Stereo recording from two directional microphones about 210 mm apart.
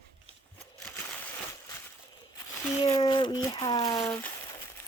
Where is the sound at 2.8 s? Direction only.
25° left (ahead or behind).